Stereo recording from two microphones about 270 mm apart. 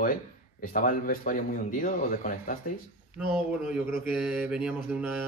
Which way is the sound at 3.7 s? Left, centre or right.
Centre.